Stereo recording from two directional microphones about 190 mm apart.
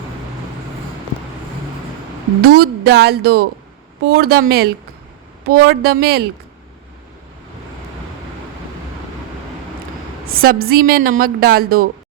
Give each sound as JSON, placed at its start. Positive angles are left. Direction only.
{"t": 2.4, "sound": "speech", "side_deg": -55}
{"t": 10.4, "sound": "a woman's voice", "side_deg": -50}